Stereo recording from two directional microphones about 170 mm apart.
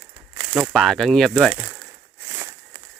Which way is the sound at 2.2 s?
15° right (ahead or behind).